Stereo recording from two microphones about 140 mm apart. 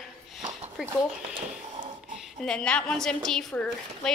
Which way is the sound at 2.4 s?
10° left (ahead or behind).